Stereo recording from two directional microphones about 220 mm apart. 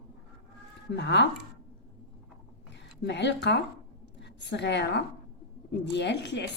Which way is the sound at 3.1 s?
50° left (ahead or behind).